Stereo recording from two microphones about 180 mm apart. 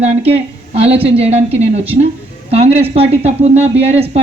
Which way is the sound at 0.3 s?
35° right (ahead or behind).